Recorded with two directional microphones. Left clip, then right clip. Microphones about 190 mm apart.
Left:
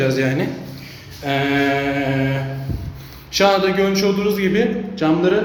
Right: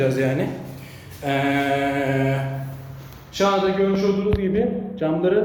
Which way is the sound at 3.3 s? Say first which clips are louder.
Left 4 dB; 15° left (ahead or behind).